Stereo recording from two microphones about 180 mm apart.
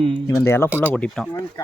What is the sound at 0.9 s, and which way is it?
Speech, 5° left (ahead or behind).